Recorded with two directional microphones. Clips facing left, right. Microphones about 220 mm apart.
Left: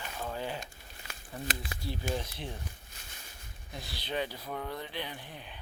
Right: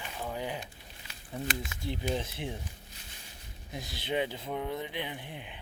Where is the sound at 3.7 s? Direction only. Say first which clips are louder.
Right 3 dB; 20° right (ahead or behind).